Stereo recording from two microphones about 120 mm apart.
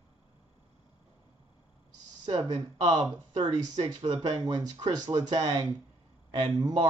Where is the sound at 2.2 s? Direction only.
35° right (ahead or behind).